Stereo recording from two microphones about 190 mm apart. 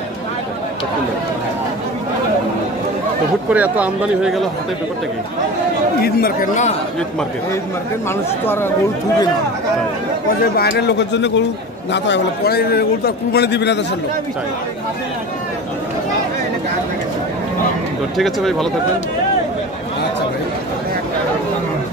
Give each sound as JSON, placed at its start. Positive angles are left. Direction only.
{"t": 3.5, "sound": "speech", "side_deg": -5}
{"t": 6.0, "sound": "speech", "side_deg": 45}
{"t": 10.4, "sound": "a man's voice", "side_deg": 55}
{"t": 18.1, "sound": "speech", "side_deg": 0}